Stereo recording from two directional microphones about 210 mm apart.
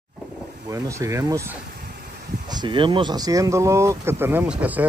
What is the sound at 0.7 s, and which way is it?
Speech, 15° right (ahead or behind).